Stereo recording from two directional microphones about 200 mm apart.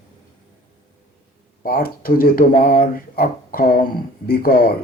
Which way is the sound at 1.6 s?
50° left (ahead or behind).